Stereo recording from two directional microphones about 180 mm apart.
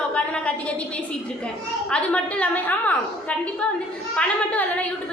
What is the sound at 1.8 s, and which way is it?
A woman's voice, 5° left (ahead or behind).